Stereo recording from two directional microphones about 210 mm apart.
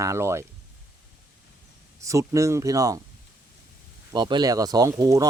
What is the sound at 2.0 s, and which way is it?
Speech, 15° right (ahead or behind).